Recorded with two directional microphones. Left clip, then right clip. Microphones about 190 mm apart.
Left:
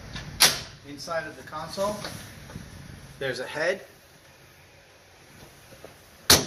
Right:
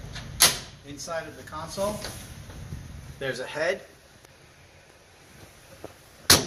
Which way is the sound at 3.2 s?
30° left (ahead or behind).